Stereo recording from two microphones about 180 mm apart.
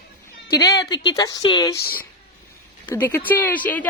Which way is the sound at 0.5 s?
20° left (ahead or behind).